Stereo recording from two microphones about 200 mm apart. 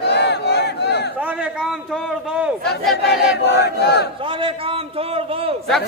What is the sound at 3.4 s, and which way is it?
Speech, 55° left (ahead or behind).